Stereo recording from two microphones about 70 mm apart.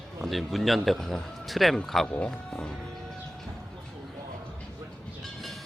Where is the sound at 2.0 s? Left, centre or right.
Centre.